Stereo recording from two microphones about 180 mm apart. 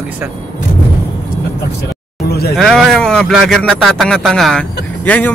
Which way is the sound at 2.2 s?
60° left (ahead or behind).